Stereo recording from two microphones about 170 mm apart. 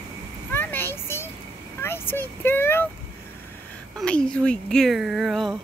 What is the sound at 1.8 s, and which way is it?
Speech, 15° left (ahead or behind).